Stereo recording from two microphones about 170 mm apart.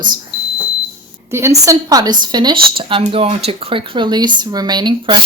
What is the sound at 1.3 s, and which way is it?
Speech, 15° right (ahead or behind).